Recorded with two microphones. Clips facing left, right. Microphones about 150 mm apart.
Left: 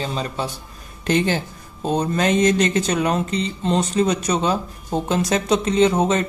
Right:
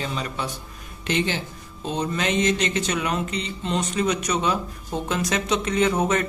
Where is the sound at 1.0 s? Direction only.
45° left (ahead or behind).